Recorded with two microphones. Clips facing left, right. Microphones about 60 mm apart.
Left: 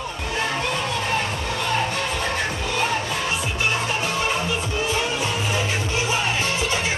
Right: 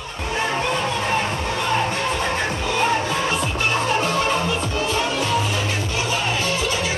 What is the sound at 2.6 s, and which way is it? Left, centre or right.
Music, centre.